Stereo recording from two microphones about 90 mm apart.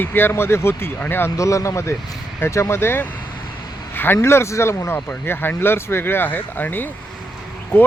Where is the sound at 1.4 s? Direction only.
35° left (ahead or behind).